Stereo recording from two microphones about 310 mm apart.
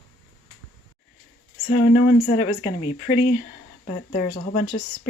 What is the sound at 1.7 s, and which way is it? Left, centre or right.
Speech, left.